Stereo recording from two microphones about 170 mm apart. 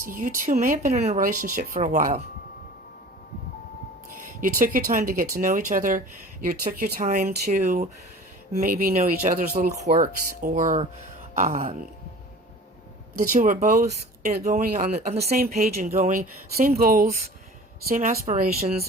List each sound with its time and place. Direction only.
0.0 s speech: 55° right (ahead or behind)
0.9 s speech: 40° right (ahead or behind)
1.2 s speech: 55° right (ahead or behind)
4.4 s speech: 55° right (ahead or behind)
6.5 s speech: 65° right (ahead or behind)
13.1 s speech: 55° right (ahead or behind)
15.9 s speech: 45° right (ahead or behind)
17.8 s speech: 50° right (ahead or behind)